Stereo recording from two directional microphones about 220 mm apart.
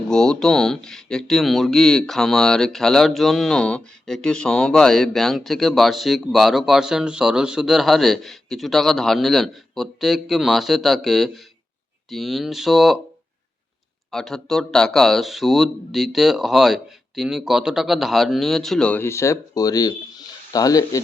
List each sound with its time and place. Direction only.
0.1 s speech: 5° left (ahead or behind)
14.1 s speech: centre (ahead or behind)